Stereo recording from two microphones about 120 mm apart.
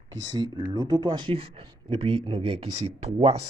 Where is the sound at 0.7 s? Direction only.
35° right (ahead or behind); by 3.4 s 55° right (ahead or behind).